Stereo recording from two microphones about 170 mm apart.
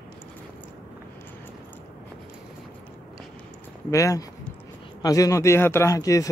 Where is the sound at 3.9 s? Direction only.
20° left (ahead or behind).